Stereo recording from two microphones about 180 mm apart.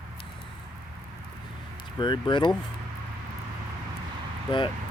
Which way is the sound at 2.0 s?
25° left (ahead or behind).